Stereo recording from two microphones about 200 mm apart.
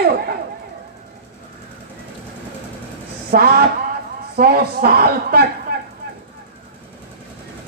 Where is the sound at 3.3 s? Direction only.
50° right (ahead or behind).